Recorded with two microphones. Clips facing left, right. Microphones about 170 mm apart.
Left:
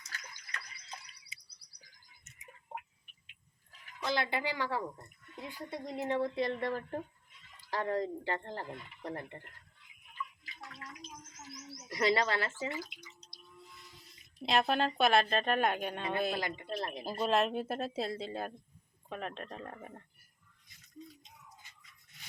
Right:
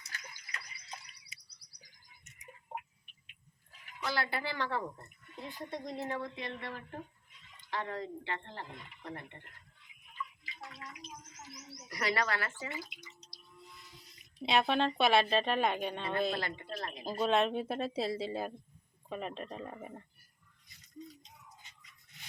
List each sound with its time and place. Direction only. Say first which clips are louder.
4.0 s speech: left 2 dB; 20° left (ahead or behind)
6.1 s speech: left 7 dB; 30° left (ahead or behind)
10.4 s bathtub: right 1 dB; centre (ahead or behind)
11.9 s speech: left 4 dB; 25° left (ahead or behind)
12.7 s drip: left 2 dB; centre (ahead or behind)
14.3 s a woman's voice: even; centre (ahead or behind)
17.1 s a woman's voice: right 1 dB; centre (ahead or behind)
21.0 s music: right 2 dB; centre (ahead or behind)